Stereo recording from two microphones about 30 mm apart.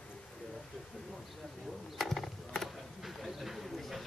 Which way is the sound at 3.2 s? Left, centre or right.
Centre.